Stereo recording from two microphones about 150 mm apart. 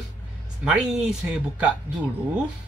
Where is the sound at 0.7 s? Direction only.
5° right (ahead or behind).